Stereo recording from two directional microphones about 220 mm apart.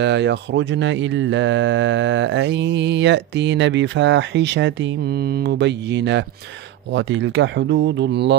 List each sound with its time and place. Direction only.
0.0 s speech: 50° right (ahead or behind)